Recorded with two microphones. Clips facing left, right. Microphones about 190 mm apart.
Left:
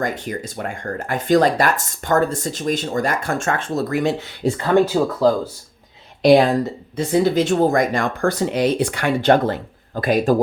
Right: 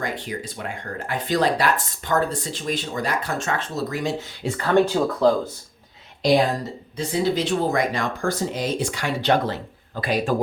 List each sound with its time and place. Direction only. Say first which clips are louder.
0.0 s speech: left 4 dB; 45° left (ahead or behind)
4.6 s speech: left 2 dB; 10° left (ahead or behind)
6.9 s speech: left 5 dB; 50° left (ahead or behind)